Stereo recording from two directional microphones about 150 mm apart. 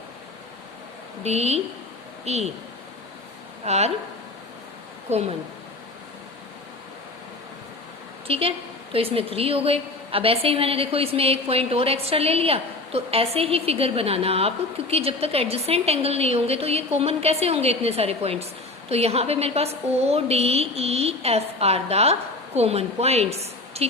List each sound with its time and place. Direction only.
1.2 s a woman's voice: 45° right (ahead or behind)
3.6 s a woman's voice: 45° right (ahead or behind)
5.0 s a woman's voice: 45° right (ahead or behind)
8.3 s a woman's voice: 40° right (ahead or behind)